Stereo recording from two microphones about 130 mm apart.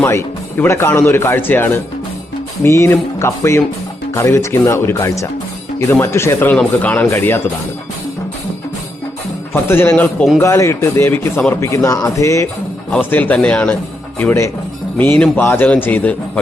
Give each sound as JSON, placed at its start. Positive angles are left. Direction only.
{"t": 0.0, "sound": "speech", "side_deg": 20}
{"t": 9.5, "sound": "speech", "side_deg": 15}